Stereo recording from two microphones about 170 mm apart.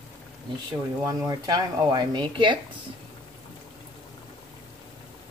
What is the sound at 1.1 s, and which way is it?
Speech, 20° right (ahead or behind).